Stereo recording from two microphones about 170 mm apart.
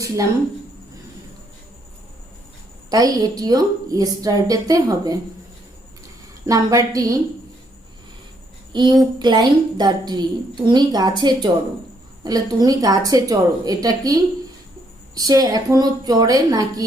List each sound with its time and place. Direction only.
2.9 s a woman's voice: 20° right (ahead or behind)
6.4 s a woman's voice: 20° right (ahead or behind)
8.7 s a woman's voice: 25° right (ahead or behind)